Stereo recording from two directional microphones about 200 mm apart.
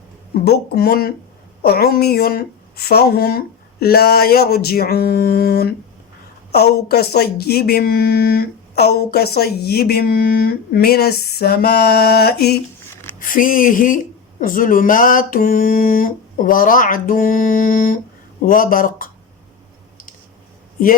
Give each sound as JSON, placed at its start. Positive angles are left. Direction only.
{"t": 0.4, "sound": "speech", "side_deg": 50}